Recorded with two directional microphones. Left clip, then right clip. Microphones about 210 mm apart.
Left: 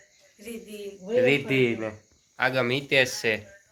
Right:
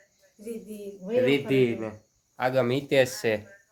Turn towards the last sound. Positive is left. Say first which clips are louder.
# even
turn(degrees=-25)  # may be behind; listen again after turning